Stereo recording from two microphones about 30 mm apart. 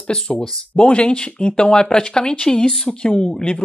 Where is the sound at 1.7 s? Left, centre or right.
Left.